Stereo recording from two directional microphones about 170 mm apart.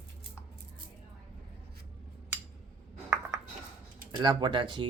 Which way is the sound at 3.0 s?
15° right (ahead or behind).